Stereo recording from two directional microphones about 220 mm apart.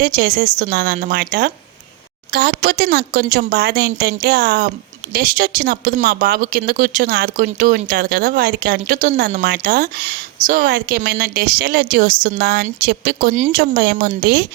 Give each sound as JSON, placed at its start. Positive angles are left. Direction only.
{"t": 0.0, "sound": "a woman's voice", "side_deg": -40}